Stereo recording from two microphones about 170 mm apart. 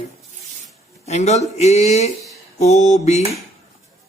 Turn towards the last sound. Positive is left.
turn(degrees=40)  # may be behind; listen again after turning